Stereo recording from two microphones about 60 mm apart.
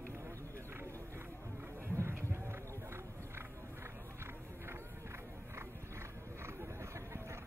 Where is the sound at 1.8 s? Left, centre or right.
Right.